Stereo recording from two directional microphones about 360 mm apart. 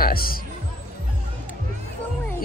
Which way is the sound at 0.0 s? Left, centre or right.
Left.